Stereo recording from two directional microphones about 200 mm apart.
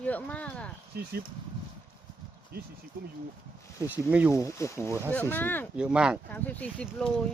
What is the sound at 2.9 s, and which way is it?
Speech, 50° right (ahead or behind).